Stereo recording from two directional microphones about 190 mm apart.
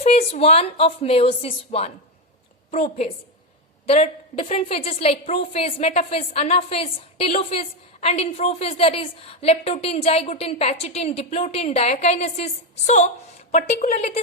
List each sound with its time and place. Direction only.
0.0 s a woman's voice: 35° left (ahead or behind)